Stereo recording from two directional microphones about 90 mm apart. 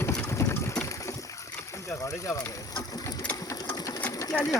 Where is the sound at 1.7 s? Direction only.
35° left (ahead or behind).